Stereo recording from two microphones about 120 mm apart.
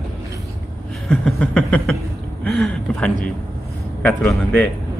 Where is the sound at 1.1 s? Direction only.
5° left (ahead or behind).